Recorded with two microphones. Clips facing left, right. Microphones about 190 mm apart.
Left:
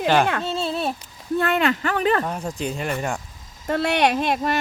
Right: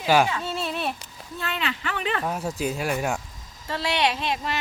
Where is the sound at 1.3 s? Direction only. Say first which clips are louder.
Left 10 dB; 55° left (ahead or behind).